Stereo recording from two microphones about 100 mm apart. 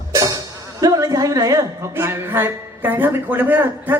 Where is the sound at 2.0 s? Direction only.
25° right (ahead or behind).